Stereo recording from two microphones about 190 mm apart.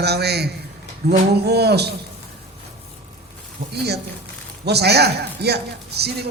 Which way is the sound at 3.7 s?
60° right (ahead or behind).